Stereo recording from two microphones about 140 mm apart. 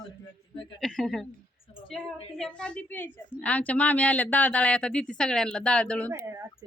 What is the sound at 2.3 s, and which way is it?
A woman's voice, 5° left (ahead or behind).